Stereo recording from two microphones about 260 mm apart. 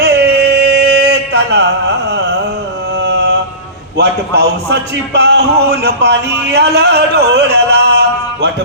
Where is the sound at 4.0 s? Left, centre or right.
Right.